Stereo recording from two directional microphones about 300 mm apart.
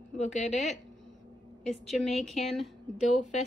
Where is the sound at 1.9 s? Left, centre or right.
Centre.